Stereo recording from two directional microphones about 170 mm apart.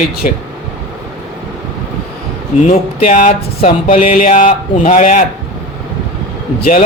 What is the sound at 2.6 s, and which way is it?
A man's voice, 50° left (ahead or behind).